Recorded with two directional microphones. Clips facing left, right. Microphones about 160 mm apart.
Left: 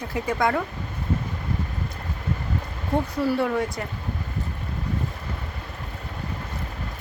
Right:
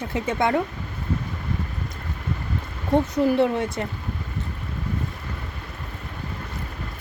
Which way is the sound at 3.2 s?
20° right (ahead or behind).